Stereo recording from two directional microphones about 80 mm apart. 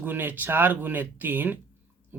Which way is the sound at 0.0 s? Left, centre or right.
Right.